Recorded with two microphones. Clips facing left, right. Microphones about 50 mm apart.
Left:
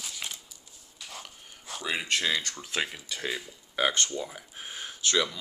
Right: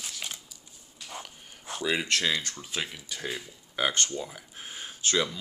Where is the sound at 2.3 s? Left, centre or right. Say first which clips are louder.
Left 2 dB; left.